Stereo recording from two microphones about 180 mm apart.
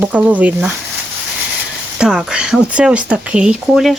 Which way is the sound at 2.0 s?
5° right (ahead or behind).